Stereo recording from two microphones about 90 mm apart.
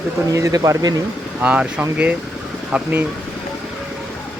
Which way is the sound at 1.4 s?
15° right (ahead or behind).